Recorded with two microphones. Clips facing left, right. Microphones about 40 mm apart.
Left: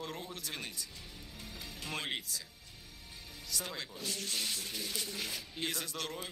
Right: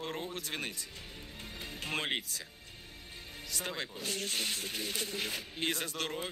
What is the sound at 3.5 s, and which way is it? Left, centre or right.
Speech, right.